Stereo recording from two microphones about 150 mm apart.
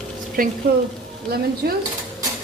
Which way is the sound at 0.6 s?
90° right.